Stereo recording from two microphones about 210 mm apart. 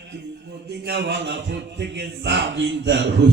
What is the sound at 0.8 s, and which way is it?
Speech, 55° right (ahead or behind).